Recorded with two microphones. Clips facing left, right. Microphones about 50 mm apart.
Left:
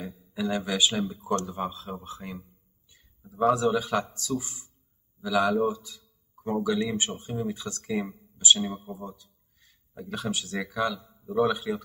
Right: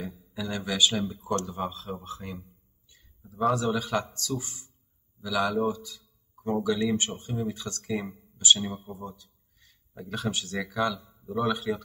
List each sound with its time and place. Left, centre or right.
0.0 s a sound: centre
0.3 s speech: centre
1.3 s a man's voice: centre
5.2 s speech: centre